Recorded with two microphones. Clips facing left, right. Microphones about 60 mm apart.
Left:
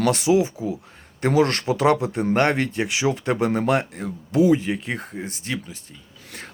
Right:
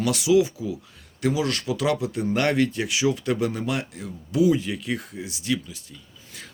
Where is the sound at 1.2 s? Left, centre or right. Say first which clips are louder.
Left 5 dB; left.